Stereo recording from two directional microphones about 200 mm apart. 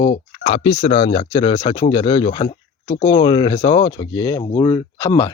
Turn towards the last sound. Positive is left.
turn(degrees=15)  # may be behind; listen again after turning